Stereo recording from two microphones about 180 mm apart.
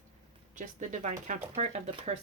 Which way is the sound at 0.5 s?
45° right (ahead or behind).